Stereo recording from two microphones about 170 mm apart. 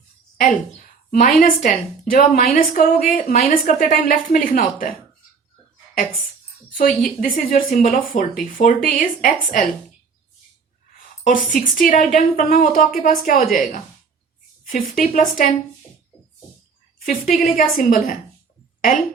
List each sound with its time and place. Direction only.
0.3 s a woman's voice: 50° left (ahead or behind)
6.7 s speech: 50° left (ahead or behind)
11.3 s speech: 55° left (ahead or behind)
17.1 s a woman's voice: 55° left (ahead or behind)